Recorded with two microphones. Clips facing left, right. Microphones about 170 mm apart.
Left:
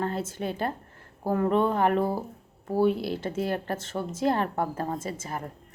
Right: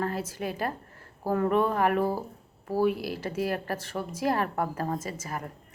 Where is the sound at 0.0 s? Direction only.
25° left (ahead or behind).